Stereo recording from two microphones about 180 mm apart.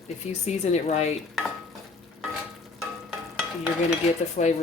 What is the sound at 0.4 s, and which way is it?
Speech, 40° left (ahead or behind).